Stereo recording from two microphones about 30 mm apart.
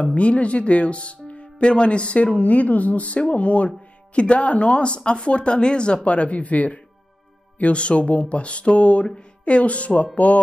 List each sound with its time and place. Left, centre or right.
0.0 s speech: left
6.0 s speech: left
7.7 s speech: left
10.1 s speech: left